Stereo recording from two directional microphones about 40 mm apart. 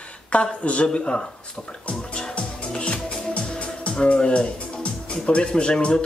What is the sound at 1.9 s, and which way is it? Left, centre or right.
Music, left.